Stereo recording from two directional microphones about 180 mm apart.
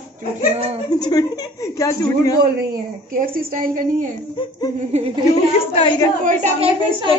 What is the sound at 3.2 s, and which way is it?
A woman's voice, 50° right (ahead or behind).